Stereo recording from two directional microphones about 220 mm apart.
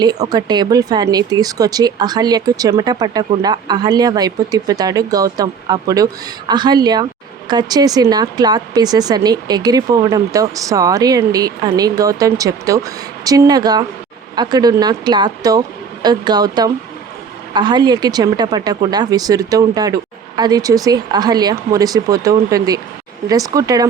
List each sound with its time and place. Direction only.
0.0 s speech: 20° right (ahead or behind)